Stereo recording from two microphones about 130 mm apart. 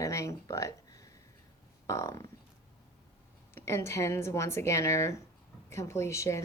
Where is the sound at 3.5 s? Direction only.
20° left (ahead or behind).